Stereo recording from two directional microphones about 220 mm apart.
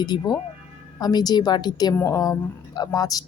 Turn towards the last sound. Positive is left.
turn(degrees=15)  # may be behind; listen again after turning